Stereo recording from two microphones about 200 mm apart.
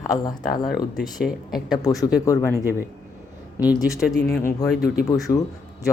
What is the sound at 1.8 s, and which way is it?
Speech, 15° left (ahead or behind).